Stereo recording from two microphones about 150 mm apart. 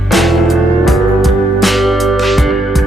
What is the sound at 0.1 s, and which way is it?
Music, centre (ahead or behind).